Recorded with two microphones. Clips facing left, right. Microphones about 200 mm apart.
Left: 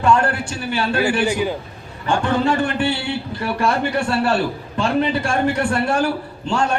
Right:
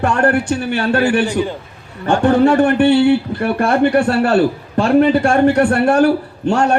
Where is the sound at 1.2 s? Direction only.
10° left (ahead or behind).